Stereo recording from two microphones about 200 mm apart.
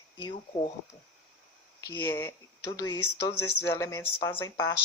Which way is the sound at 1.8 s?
15° left (ahead or behind).